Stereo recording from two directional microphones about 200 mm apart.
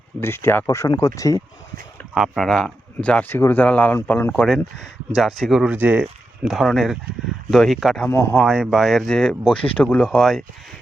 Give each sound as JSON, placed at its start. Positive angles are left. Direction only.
{"t": 0.2, "sound": "speech", "side_deg": 10}
{"t": 2.1, "sound": "speech", "side_deg": 0}